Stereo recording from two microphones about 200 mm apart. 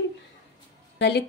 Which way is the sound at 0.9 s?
55° left (ahead or behind).